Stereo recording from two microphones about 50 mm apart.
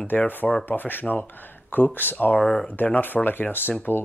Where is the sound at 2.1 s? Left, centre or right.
Left.